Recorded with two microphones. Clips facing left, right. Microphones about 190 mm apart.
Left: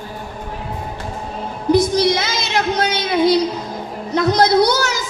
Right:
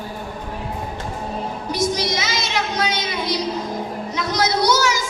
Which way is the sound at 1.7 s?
55° left (ahead or behind).